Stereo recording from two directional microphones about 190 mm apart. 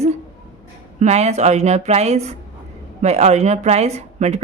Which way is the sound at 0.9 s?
35° right (ahead or behind).